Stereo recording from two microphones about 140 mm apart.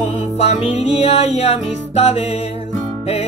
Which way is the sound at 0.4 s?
50° left (ahead or behind).